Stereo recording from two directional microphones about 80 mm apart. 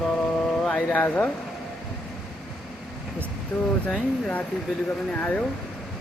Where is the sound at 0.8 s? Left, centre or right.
Centre.